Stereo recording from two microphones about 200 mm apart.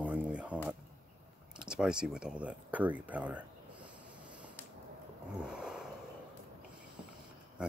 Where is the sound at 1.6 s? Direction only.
5° right (ahead or behind).